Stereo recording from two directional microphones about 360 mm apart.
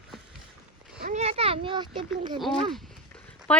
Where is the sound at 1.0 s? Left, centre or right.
Centre.